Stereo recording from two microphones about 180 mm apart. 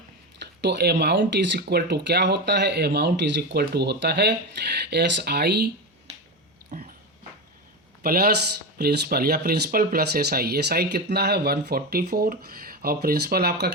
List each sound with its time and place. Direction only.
0.6 s speech: 70° right (ahead or behind)
6.7 s a sound: 45° right (ahead or behind)
8.0 s speech: 60° right (ahead or behind)